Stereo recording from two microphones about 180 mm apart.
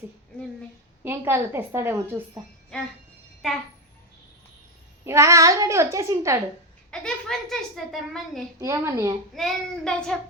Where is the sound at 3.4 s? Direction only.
Centre (ahead or behind).